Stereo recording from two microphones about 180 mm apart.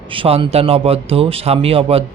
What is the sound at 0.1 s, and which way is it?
Speech, 30° right (ahead or behind).